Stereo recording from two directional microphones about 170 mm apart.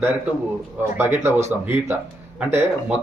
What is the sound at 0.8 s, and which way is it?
Speech, 15° right (ahead or behind).